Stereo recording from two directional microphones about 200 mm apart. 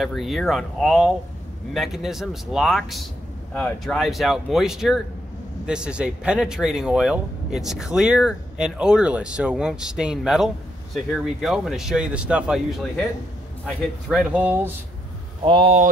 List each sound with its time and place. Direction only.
0.0 s speech: centre (ahead or behind)
15.4 s speech: 25° right (ahead or behind)